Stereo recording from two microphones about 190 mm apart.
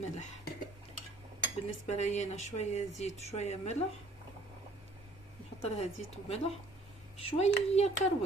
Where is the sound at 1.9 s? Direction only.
35° left (ahead or behind).